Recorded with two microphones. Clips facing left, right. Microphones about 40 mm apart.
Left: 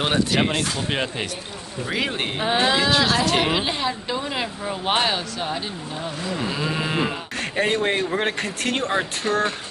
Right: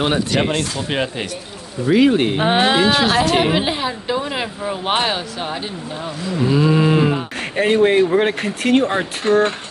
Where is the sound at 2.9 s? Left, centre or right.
Centre.